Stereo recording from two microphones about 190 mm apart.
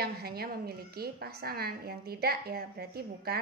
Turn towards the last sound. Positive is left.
turn(degrees=-55)  # may be behind; listen again after turning